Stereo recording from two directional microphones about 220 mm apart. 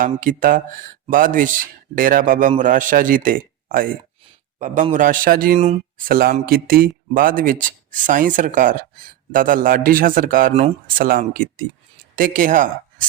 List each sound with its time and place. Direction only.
0.0 s a man's voice: 35° right (ahead or behind)
5.5 s speech: 30° right (ahead or behind)
6.1 s a man's voice: 40° right (ahead or behind)